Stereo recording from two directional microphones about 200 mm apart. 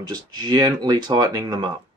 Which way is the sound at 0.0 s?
20° right (ahead or behind).